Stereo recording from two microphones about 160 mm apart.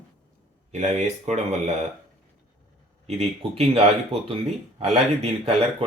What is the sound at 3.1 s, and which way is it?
Speech, 40° right (ahead or behind).